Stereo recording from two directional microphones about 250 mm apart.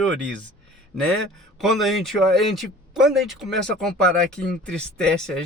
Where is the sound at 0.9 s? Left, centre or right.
Centre.